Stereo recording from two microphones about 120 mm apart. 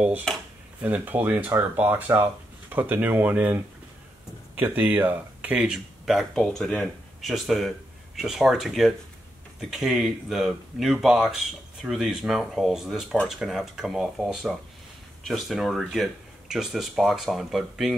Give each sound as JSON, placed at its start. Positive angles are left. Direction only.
{"t": 0.7, "sound": "speech", "side_deg": -15}